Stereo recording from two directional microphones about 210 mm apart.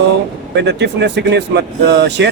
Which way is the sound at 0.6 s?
55° right (ahead or behind).